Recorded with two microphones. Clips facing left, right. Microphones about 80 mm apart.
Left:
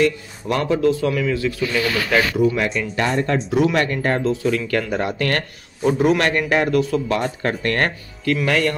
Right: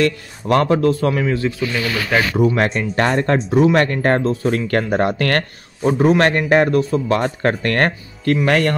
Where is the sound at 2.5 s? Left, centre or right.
Right.